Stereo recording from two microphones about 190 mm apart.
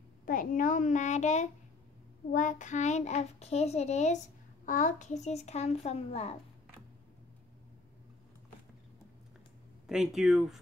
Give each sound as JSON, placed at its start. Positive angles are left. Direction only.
{"t": 0.2, "sound": "a child's voice", "side_deg": 45}
{"t": 9.8, "sound": "speech", "side_deg": 0}